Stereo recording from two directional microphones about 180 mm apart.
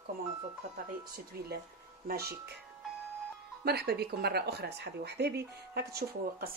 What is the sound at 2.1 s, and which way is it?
Speech, 60° right (ahead or behind).